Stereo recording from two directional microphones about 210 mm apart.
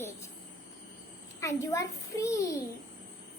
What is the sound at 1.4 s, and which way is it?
A child's voice, 15° left (ahead or behind).